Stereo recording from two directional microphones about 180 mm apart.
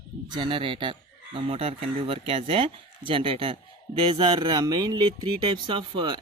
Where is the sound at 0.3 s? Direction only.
25° right (ahead or behind).